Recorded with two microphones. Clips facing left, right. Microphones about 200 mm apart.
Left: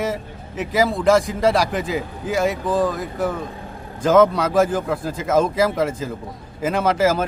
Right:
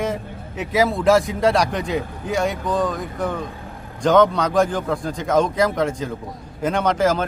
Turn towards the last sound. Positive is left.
turn(degrees=5)  # may be behind; listen again after turning